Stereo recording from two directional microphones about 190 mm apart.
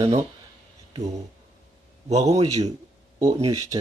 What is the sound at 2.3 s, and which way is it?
Speech, 35° right (ahead or behind).